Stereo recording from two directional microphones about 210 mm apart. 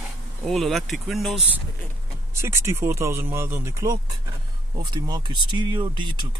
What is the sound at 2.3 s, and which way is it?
Speech, 10° right (ahead or behind).